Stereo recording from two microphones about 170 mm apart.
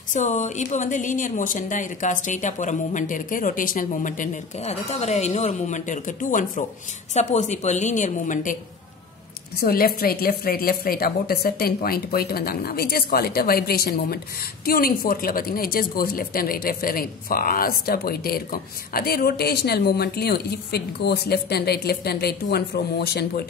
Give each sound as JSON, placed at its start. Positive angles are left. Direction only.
{"t": 0.1, "sound": "speech", "side_deg": 45}
{"t": 9.6, "sound": "a woman's voice", "side_deg": 60}